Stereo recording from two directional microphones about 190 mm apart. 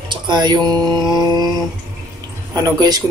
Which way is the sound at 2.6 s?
20° right (ahead or behind).